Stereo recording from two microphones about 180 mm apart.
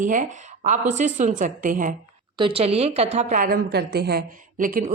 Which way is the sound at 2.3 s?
30° right (ahead or behind).